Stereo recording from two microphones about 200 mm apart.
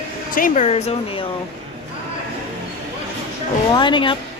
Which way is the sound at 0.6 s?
30° left (ahead or behind).